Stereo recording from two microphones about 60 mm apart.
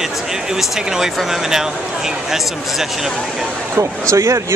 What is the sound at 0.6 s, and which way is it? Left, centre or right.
Speech, centre.